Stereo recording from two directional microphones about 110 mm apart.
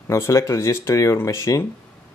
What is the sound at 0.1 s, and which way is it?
Speech, 25° left (ahead or behind).